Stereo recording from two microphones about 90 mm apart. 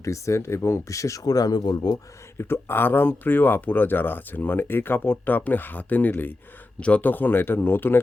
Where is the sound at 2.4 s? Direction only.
25° left (ahead or behind).